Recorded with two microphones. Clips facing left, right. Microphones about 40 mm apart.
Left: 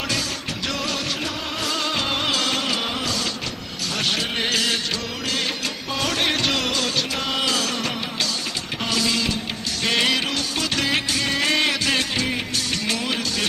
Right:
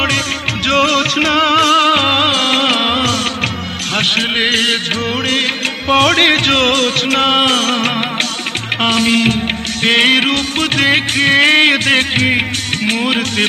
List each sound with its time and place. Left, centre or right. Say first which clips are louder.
0.7 s music: right 15 dB; right
5.9 s music: right 13 dB; right